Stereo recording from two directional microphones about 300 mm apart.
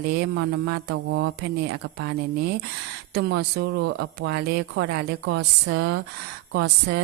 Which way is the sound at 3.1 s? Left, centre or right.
Right.